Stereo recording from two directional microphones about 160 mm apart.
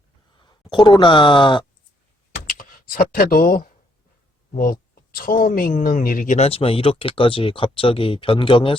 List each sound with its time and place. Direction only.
0.3 s speech: 30° left (ahead or behind)
2.5 s speech: 60° left (ahead or behind); by 8.7 s 35° left (ahead or behind)